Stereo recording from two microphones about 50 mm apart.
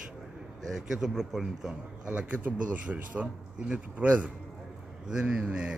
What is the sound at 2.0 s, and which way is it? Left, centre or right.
A man's voice, right.